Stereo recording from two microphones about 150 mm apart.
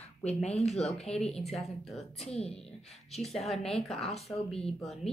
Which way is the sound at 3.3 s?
Centre (ahead or behind).